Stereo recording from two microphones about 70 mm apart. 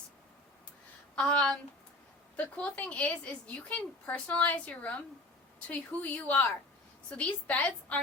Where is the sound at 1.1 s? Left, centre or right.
Centre.